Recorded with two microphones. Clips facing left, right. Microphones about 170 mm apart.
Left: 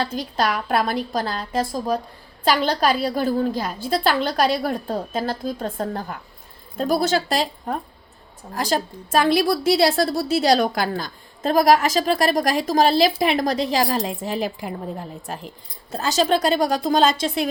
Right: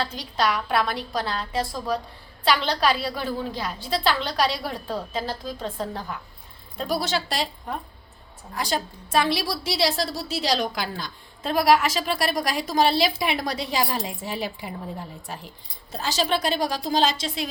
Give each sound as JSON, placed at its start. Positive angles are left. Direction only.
{"t": 0.0, "sound": "a woman's voice", "side_deg": 45}